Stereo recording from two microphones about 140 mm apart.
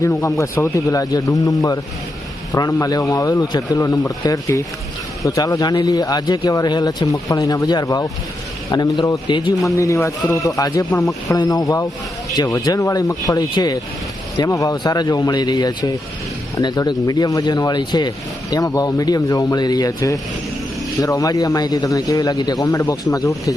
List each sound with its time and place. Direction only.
0.0 s a man's voice: 25° left (ahead or behind)
9.6 s speech: 20° left (ahead or behind)